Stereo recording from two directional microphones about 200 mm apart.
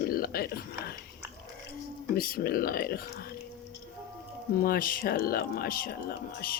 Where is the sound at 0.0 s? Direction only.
45° left (ahead or behind).